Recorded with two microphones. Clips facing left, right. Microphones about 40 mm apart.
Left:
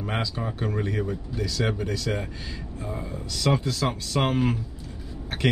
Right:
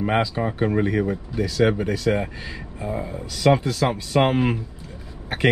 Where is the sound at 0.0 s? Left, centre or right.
Centre.